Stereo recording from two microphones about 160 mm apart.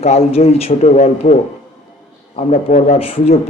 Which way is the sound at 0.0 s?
40° left (ahead or behind).